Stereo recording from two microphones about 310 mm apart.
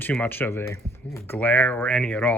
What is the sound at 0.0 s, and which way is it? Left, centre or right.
Speech, centre.